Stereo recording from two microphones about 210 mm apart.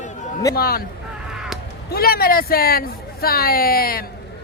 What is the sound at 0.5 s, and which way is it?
Speech, 45° left (ahead or behind).